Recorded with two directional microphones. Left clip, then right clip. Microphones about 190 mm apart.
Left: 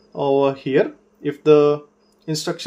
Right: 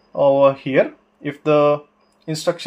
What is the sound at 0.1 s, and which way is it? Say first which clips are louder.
Speech: right 4 dB; 25° right (ahead or behind).